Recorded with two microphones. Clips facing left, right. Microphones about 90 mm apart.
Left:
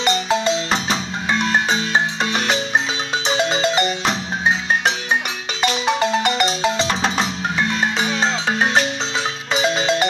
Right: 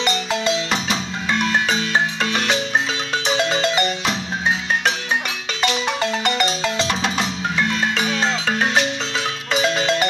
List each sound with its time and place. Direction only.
0.0 s music: 25° left (ahead or behind)
1.4 s marimba: 25° left (ahead or behind)
3.3 s music: 20° left (ahead or behind)
5.9 s music: 20° left (ahead or behind)
6.9 s percussion: 35° left (ahead or behind)
7.8 s music: 25° left (ahead or behind)